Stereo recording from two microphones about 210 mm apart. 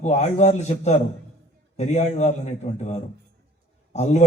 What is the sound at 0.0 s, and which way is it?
A man's voice, 35° left (ahead or behind).